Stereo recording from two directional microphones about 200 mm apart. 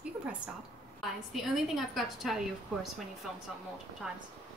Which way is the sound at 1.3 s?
Centre (ahead or behind).